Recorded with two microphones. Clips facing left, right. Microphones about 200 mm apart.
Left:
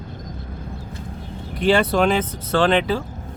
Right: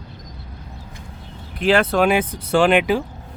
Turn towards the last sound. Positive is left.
turn(degrees=-15)  # may be behind; listen again after turning